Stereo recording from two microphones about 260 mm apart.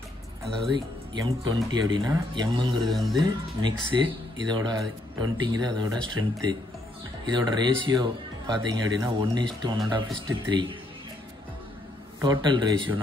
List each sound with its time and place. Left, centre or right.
0.7 s speech: centre
2.8 s speech: centre
3.2 s speech: centre
12.2 s speech: centre